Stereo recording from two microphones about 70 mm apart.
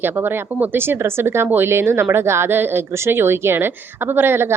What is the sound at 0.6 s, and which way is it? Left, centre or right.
Speech, right.